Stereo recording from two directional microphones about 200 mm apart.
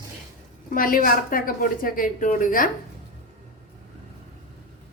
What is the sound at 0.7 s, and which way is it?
A woman's voice, 45° left (ahead or behind).